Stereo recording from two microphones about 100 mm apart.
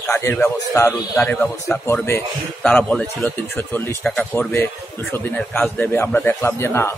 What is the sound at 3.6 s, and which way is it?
Speech, 20° left (ahead or behind).